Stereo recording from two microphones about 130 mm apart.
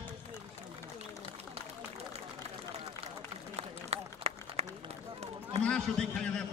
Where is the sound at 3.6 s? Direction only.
50° right (ahead or behind).